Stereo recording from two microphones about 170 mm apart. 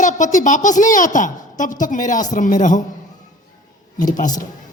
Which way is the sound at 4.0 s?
50° left (ahead or behind).